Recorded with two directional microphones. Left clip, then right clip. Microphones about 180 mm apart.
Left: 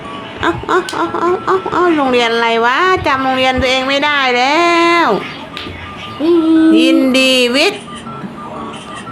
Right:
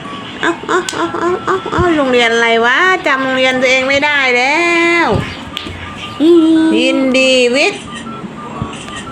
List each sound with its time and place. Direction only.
0.4 s speech: 5° left (ahead or behind)
6.7 s speech: 25° left (ahead or behind)